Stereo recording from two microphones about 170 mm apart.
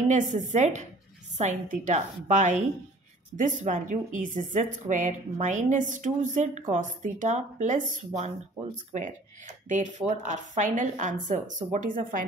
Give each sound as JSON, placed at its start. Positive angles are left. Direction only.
{"t": 0.1, "sound": "a woman's voice", "side_deg": -45}
{"t": 9.7, "sound": "a woman's voice", "side_deg": -45}